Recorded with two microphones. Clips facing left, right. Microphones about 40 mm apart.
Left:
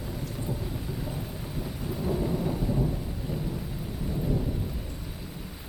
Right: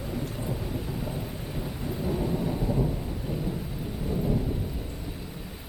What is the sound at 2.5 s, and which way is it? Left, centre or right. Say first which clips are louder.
Thunder: right 1 dB; centre.